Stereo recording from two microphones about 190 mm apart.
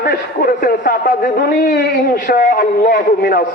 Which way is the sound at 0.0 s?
50° left (ahead or behind).